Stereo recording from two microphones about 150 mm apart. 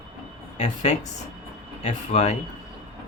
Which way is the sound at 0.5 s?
50° left (ahead or behind).